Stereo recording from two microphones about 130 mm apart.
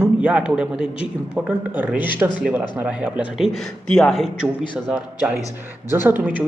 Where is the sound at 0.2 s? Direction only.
10° right (ahead or behind).